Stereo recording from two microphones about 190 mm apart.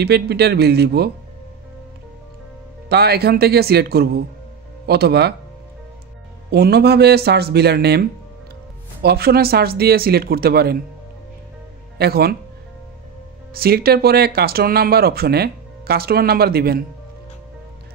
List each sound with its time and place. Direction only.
0.0 s speech: 60° right (ahead or behind)
2.9 s speech: 55° right (ahead or behind)
6.5 s speech: 60° right (ahead or behind)
12.0 s speech: 55° right (ahead or behind)
13.5 s speech: 55° right (ahead or behind)